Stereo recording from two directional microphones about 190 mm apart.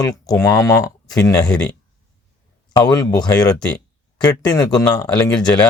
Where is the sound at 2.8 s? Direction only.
20° left (ahead or behind).